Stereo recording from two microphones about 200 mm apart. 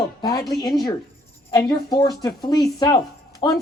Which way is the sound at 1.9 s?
20° left (ahead or behind).